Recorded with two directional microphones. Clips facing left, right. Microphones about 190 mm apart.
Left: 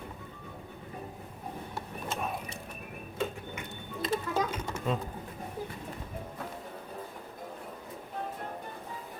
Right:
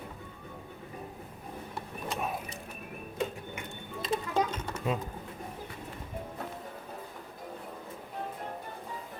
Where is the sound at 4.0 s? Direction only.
Centre (ahead or behind).